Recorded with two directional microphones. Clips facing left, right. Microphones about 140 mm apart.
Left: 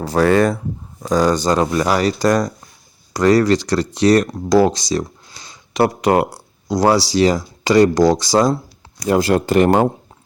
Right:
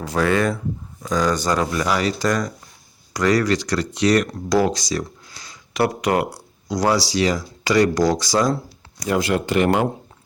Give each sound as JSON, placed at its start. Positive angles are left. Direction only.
{"t": 0.0, "sound": "speech", "side_deg": 35}
{"t": 1.8, "sound": "speech", "side_deg": 40}